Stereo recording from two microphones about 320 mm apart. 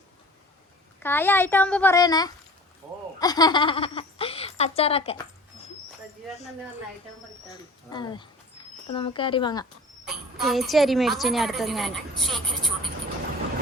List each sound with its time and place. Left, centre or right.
1.0 s a woman's voice: centre
7.5 s a woman's voice: centre
10.1 s a woman's voice: centre